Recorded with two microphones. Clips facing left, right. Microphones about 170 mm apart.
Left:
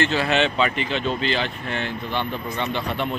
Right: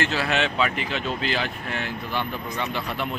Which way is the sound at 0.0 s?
5° right (ahead or behind).